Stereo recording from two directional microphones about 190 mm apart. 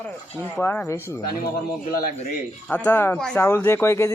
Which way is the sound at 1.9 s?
50° left (ahead or behind).